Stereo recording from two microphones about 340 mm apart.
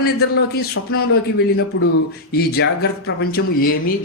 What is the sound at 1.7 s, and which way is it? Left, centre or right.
Speech, left.